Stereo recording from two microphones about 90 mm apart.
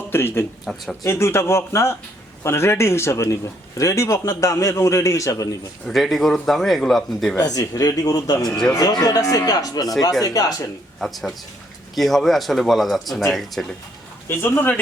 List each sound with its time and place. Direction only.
0.1 s speech: 25° left (ahead or behind)
0.6 s speech: centre (ahead or behind)
1.0 s a man's voice: 30° left (ahead or behind)
5.9 s speech: centre (ahead or behind)
7.3 s speech: 45° left (ahead or behind)
8.4 s speech: 5° left (ahead or behind)
8.7 s speech: 45° left (ahead or behind)
11.0 s speech: centre (ahead or behind)
14.3 s speech: 25° left (ahead or behind)